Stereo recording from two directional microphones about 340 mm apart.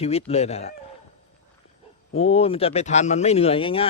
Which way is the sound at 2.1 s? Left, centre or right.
Centre.